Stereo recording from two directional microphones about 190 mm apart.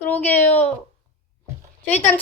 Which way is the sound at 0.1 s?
10° left (ahead or behind).